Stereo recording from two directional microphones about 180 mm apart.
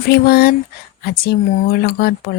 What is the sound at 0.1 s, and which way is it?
Speech, 60° left (ahead or behind).